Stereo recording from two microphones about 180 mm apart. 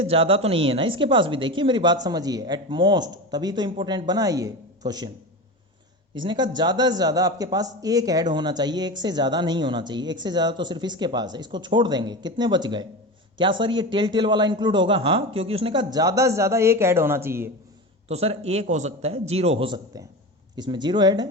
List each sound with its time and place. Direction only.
0.0 s a man's voice: 30° right (ahead or behind)
6.1 s a man's voice: 25° right (ahead or behind)
18.1 s a man's voice: 35° right (ahead or behind)